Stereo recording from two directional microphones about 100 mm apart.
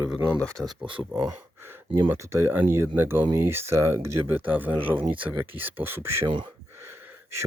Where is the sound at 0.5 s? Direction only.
Centre (ahead or behind).